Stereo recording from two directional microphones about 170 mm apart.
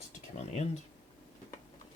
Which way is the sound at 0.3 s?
40° left (ahead or behind).